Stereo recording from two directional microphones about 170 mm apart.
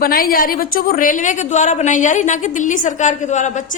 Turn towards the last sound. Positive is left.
turn(degrees=45)  # may be behind; listen again after turning